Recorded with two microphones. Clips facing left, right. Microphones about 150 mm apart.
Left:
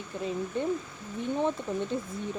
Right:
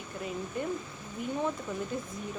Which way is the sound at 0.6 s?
30° left (ahead or behind).